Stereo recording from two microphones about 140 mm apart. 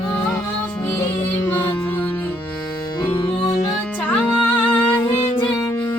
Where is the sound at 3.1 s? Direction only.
35° left (ahead or behind).